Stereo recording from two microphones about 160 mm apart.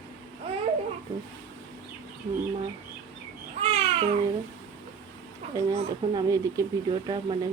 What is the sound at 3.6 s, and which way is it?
Babbling, 40° right (ahead or behind).